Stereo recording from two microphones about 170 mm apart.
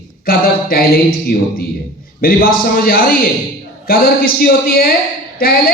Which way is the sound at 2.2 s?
60° left (ahead or behind).